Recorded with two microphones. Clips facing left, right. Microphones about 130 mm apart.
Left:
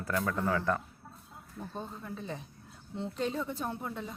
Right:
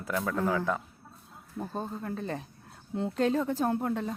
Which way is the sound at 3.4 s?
40° right (ahead or behind).